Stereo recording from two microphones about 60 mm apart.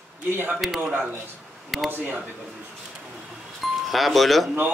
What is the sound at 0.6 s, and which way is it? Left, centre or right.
Speech, centre.